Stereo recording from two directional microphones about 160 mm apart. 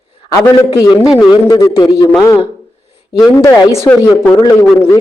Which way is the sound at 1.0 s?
5° right (ahead or behind).